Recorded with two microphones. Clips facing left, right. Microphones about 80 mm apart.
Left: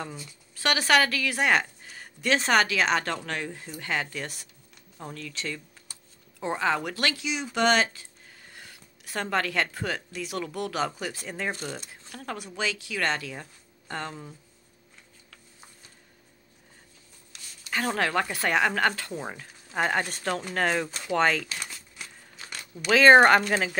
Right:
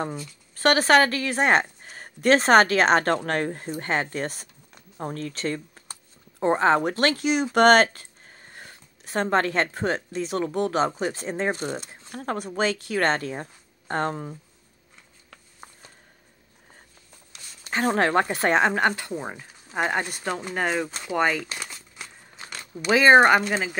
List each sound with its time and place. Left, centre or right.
0.6 s a woman's voice: right
8.4 s speech: right
17.6 s speech: right
22.6 s speech: centre